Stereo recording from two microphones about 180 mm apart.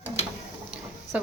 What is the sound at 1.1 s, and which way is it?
Speech, 5° right (ahead or behind).